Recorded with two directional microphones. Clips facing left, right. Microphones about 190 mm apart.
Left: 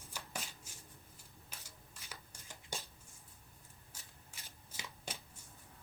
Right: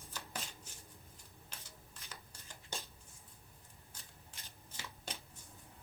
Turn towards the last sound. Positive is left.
turn(degrees=10)  # may be behind; listen again after turning